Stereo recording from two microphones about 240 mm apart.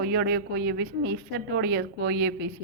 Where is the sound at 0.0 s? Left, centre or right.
Right.